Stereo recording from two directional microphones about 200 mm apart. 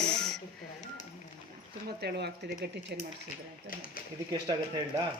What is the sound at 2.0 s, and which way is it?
Speech, 55° right (ahead or behind).